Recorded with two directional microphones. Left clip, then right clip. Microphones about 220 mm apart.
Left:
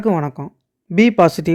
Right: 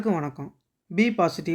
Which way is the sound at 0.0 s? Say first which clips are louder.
Left 8 dB; 40° left (ahead or behind).